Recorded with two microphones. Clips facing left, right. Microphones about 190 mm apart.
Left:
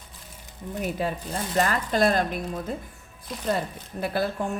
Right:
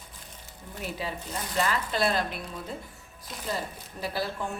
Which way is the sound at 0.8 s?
50° left (ahead or behind).